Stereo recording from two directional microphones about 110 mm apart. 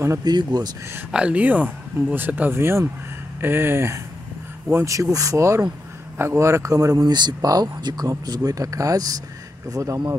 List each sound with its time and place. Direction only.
0.2 s speech: 40° right (ahead or behind)
1.1 s speech: 10° right (ahead or behind); by 10.1 s 30° right (ahead or behind)